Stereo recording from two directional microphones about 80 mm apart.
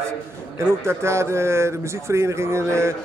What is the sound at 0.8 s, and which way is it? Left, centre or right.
Speech, right.